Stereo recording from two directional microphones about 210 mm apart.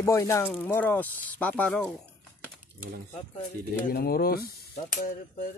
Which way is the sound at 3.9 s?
45° left (ahead or behind).